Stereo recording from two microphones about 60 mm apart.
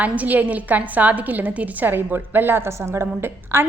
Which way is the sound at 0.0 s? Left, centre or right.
Right.